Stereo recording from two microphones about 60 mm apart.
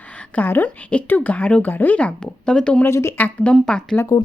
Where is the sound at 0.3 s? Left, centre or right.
Left.